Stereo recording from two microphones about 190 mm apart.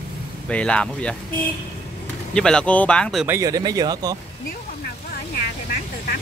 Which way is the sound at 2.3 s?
5° left (ahead or behind).